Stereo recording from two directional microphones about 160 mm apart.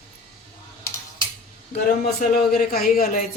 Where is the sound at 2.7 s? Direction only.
65° left (ahead or behind).